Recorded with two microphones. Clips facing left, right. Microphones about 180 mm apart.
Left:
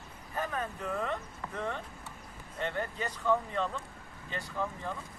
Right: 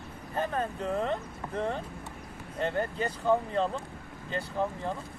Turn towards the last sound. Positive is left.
turn(degrees=-30)  # may be behind; listen again after turning